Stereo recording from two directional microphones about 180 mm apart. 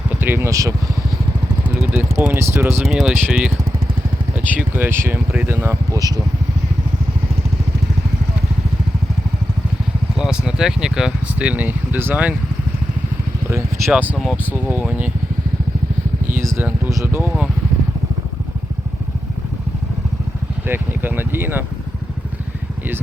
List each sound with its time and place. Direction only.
0.2 s speech: 15° right (ahead or behind)
1.9 s speech: 10° right (ahead or behind)
2.8 s speech: centre (ahead or behind); by 6.1 s 20° right (ahead or behind)
10.2 s speech: 5° right (ahead or behind)
13.9 s speech: 10° right (ahead or behind)
16.6 s speech: 10° right (ahead or behind)
20.7 s speech: 10° right (ahead or behind)